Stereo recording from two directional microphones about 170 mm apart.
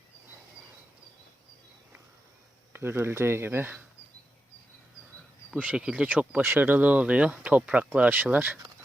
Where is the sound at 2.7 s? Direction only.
15° right (ahead or behind).